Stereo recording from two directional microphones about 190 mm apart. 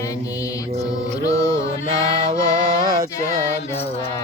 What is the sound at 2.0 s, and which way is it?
Music, 30° right (ahead or behind).